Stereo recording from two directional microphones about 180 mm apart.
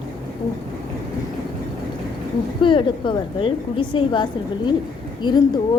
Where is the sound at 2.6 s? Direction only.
30° left (ahead or behind).